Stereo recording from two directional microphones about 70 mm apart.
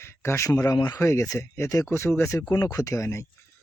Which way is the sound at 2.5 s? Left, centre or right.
Left.